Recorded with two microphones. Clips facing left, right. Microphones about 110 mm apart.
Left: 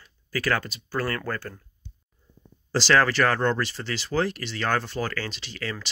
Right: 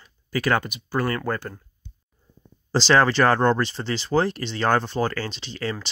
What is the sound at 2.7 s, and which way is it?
Speech, 20° right (ahead or behind).